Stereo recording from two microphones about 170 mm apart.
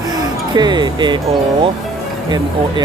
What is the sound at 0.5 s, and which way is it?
Speech, 25° right (ahead or behind).